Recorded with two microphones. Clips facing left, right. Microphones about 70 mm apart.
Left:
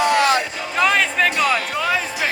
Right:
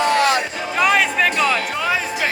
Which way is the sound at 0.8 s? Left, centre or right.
Centre.